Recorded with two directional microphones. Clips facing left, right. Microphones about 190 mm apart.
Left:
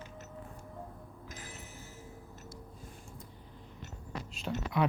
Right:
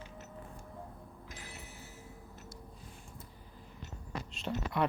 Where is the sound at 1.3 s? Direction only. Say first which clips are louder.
Left 2 dB; 45° left (ahead or behind).